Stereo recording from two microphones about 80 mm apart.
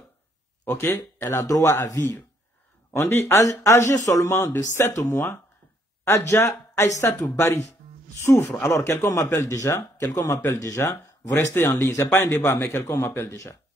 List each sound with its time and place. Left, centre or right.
0.7 s speech: left
2.0 s speech: left
11.5 s speech: left
11.8 s speech: left